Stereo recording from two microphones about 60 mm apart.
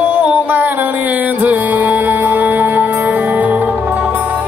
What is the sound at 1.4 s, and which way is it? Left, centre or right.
Music, right.